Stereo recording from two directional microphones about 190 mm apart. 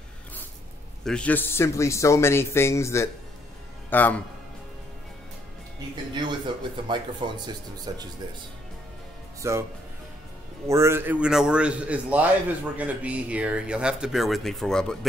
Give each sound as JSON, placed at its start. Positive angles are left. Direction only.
{"t": 1.0, "sound": "speech", "side_deg": 5}
{"t": 6.1, "sound": "speech", "side_deg": -25}
{"t": 9.4, "sound": "a man's voice", "side_deg": -15}
{"t": 10.7, "sound": "a man's voice", "side_deg": -15}